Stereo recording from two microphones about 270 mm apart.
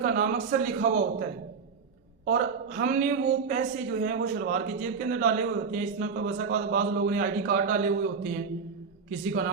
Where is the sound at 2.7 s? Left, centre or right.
Right.